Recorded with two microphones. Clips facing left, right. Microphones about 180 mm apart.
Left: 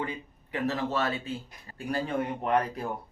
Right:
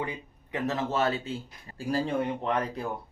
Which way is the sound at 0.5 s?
20° right (ahead or behind).